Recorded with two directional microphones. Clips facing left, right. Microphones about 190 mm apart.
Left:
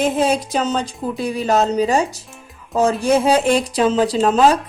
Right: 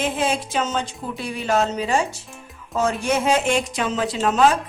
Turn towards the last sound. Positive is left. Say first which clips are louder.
# left 4 dB
turn(degrees=35)  # may be behind; listen again after turning